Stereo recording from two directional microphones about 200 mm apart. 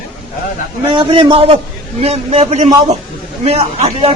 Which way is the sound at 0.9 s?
25° right (ahead or behind).